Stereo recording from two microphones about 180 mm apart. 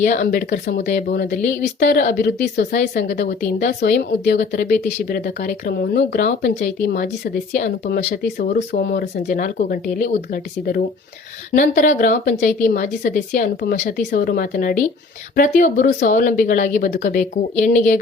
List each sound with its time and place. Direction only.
0.0 s a woman's voice: 50° left (ahead or behind)
3.8 s speech: 65° left (ahead or behind)
9.2 s a woman's voice: 50° left (ahead or behind)